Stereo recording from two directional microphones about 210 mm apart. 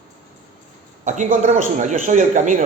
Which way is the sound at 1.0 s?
35° right (ahead or behind).